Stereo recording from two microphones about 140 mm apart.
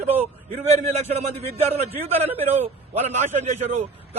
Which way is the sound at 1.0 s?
50° right (ahead or behind).